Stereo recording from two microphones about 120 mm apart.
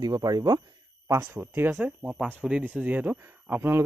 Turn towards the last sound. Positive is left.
turn(degrees=-15)  # may be behind; listen again after turning